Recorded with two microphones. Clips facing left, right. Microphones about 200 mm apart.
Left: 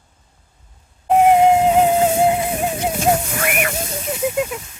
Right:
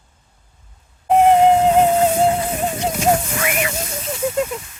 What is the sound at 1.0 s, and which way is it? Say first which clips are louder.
Wheeze: even; 5° left (ahead or behind).